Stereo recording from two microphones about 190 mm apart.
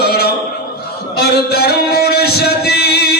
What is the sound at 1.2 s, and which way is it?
Music, 55° left (ahead or behind).